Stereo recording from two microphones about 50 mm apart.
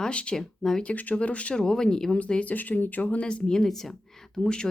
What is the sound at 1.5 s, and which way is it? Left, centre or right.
Speech, centre.